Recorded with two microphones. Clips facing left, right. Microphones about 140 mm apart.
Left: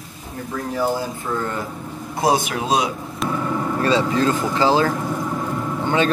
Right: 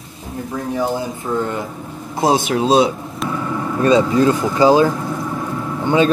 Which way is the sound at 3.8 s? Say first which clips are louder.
Right 6 dB; 15° right (ahead or behind).